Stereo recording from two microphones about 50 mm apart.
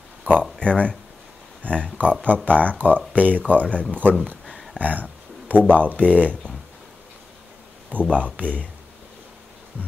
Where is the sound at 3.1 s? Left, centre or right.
Right.